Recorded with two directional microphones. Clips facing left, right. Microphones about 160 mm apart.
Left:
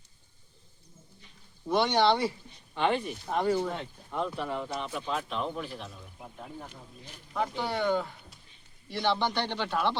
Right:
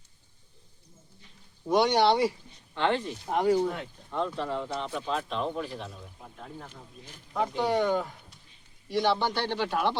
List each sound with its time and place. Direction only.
1.6 s a man's voice: 10° right (ahead or behind)
2.7 s speech: 15° left (ahead or behind)
3.2 s a man's voice: 10° right (ahead or behind)
4.1 s speech: 5° left (ahead or behind)
7.3 s a man's voice: 15° right (ahead or behind)